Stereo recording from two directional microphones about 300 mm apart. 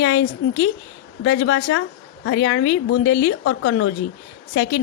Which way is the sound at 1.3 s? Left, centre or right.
Left.